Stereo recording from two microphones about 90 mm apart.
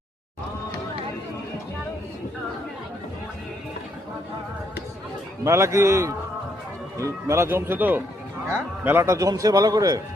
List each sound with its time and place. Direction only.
5.5 s a man's voice: 30° right (ahead or behind)
9.0 s a man's voice: 35° right (ahead or behind)